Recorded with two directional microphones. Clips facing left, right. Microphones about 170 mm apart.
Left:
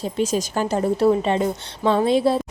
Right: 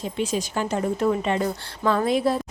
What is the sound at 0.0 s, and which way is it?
A woman's voice, 40° left (ahead or behind).